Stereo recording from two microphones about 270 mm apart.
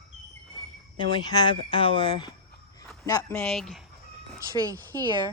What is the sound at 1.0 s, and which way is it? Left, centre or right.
Speech, centre.